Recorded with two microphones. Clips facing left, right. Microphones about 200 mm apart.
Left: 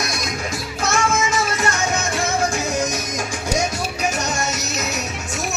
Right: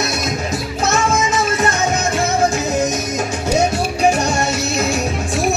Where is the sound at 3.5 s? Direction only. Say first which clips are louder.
Right 7 dB; 30° right (ahead or behind).